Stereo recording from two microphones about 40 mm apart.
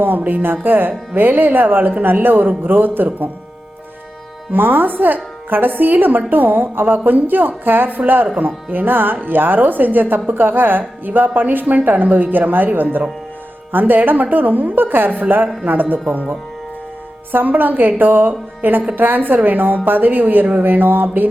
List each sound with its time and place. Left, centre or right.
0.0 s a woman's voice: right
4.5 s a woman's voice: right
17.3 s a woman's voice: right
20.6 s a sound: right